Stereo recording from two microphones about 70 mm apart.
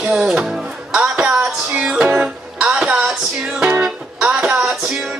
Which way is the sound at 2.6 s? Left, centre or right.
Centre.